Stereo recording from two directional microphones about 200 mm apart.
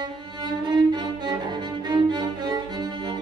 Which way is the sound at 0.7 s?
20° right (ahead or behind).